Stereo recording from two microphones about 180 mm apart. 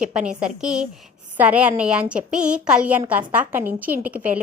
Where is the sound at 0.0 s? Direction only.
5° right (ahead or behind).